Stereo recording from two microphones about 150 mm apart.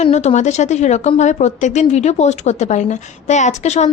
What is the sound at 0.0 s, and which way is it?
A woman's voice, 50° left (ahead or behind).